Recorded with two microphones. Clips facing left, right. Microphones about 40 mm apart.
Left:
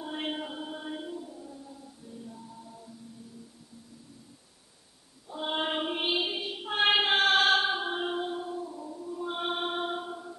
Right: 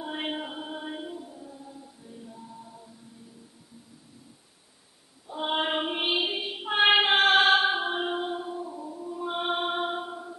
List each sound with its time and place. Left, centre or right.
0.0 s music: centre
5.3 s child singing: right